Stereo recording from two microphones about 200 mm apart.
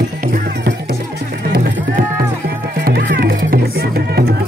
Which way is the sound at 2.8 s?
55° right (ahead or behind).